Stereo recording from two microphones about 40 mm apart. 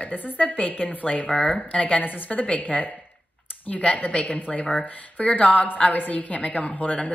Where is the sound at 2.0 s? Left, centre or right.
Left.